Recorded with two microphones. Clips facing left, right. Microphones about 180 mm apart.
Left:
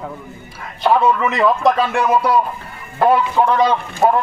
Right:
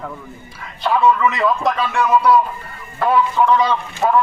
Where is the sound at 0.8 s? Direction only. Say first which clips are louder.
Left 1 dB; 40° left (ahead or behind).